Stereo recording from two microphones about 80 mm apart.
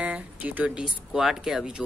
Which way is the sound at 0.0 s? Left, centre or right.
Centre.